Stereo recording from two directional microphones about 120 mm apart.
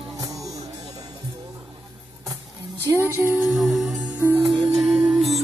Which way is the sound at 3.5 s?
Centre (ahead or behind).